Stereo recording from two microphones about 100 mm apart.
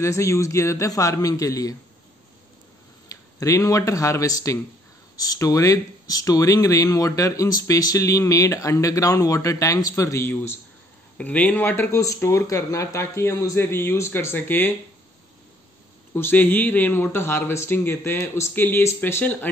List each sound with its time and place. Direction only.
0.0 s speech: 30° left (ahead or behind)
3.1 s speech: 35° left (ahead or behind)
11.1 s speech: 10° left (ahead or behind)
12.0 s a man's voice: 30° left (ahead or behind)
16.2 s a man's voice: 20° left (ahead or behind)